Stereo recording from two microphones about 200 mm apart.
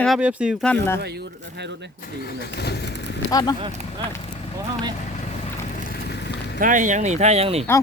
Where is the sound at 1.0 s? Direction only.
55° right (ahead or behind).